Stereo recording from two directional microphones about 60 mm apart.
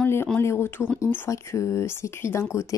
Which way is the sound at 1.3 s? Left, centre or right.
Left.